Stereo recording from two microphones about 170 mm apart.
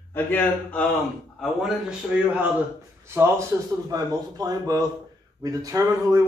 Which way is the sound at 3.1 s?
15° right (ahead or behind).